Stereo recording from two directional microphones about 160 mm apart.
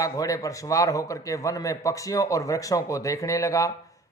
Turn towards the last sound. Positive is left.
turn(degrees=20)  # may be behind; listen again after turning